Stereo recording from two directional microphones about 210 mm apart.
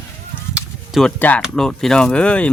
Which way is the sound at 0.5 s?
Centre (ahead or behind).